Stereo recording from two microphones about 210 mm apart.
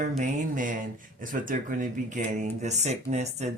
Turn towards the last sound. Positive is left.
turn(degrees=-35)  # may be behind; listen again after turning